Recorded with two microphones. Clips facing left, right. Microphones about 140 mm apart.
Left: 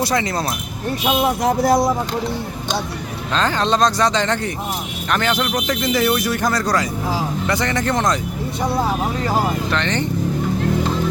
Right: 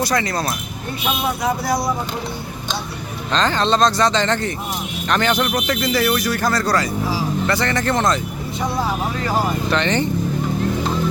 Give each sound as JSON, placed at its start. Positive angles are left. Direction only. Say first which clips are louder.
{"t": 0.0, "sound": "speech", "louder": "even", "side_deg": 20}
{"t": 1.5, "sound": "speech", "louder": "left 5 dB", "side_deg": 50}
{"t": 3.3, "sound": "speech", "louder": "right 1 dB", "side_deg": 10}
{"t": 5.6, "sound": "speech", "louder": "left 1 dB", "side_deg": 15}
{"t": 9.6, "sound": "speech", "louder": "right 2 dB", "side_deg": 0}